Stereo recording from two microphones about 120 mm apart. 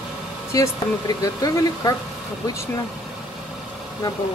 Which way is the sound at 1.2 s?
30° left (ahead or behind).